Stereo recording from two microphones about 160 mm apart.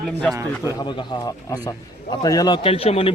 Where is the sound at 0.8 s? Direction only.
30° left (ahead or behind).